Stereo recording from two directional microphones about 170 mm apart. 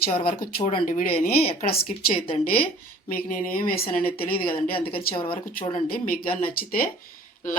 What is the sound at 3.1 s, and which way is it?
Speech, 55° left (ahead or behind).